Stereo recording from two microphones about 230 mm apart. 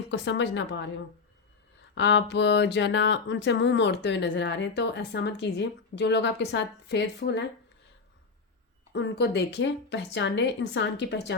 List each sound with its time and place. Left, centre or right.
0.1 s speech: left
2.0 s speech: left
8.9 s speech: left